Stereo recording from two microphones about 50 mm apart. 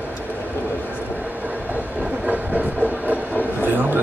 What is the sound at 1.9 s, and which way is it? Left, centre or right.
Train, right.